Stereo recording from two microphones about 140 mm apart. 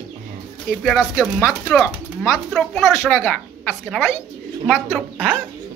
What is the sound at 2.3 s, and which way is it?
Speech, centre (ahead or behind).